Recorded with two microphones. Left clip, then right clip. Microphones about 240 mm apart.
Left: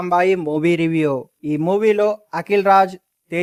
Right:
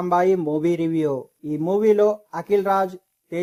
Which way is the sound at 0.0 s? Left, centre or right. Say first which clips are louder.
Left 2 dB; left.